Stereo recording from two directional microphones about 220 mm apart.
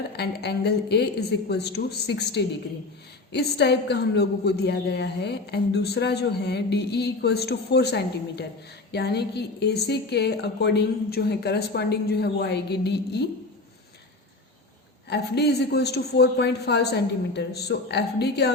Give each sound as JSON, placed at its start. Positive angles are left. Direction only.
{"t": 0.2, "sound": "a woman's voice", "side_deg": 50}
{"t": 15.1, "sound": "a woman's voice", "side_deg": 50}